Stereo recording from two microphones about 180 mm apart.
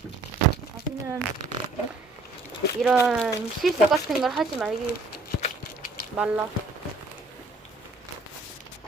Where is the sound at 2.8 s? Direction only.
10° right (ahead or behind).